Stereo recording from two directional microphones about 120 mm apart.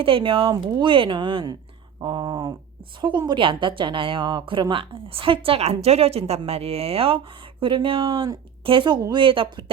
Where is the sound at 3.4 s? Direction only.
45° right (ahead or behind).